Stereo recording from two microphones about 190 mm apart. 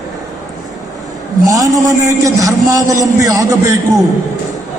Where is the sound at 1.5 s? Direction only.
15° right (ahead or behind).